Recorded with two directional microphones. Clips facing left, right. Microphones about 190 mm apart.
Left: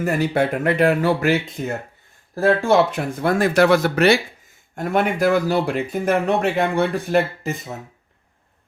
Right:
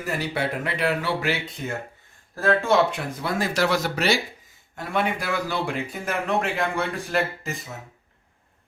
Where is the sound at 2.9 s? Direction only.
55° left (ahead or behind).